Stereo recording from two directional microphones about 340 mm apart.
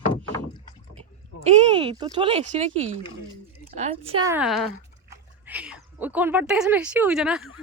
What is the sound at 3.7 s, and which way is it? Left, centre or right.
Speech, centre.